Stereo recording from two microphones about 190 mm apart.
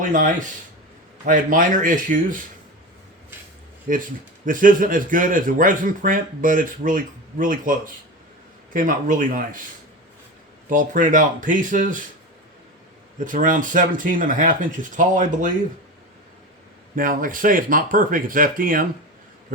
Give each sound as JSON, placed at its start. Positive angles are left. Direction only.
{"t": 0.0, "sound": "speech", "side_deg": -45}
{"t": 3.9, "sound": "speech", "side_deg": -45}
{"t": 10.7, "sound": "speech", "side_deg": -45}
{"t": 13.1, "sound": "speech", "side_deg": -45}
{"t": 16.9, "sound": "speech", "side_deg": -45}